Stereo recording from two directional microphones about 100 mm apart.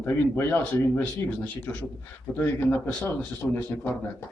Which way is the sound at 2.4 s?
20° left (ahead or behind).